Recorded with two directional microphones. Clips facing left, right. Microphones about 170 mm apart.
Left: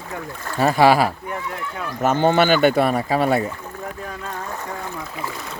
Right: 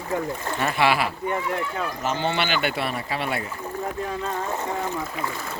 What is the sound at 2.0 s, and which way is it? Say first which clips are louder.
Speech: left 10 dB; 50° left (ahead or behind).